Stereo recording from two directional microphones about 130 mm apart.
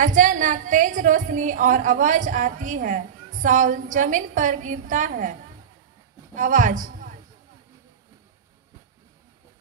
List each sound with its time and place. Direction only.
0.0 s a woman's voice: 80° right
6.3 s a woman's voice: 80° right